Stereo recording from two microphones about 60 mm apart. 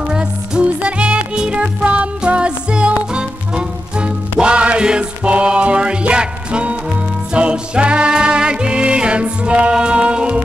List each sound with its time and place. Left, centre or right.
0.1 s music: centre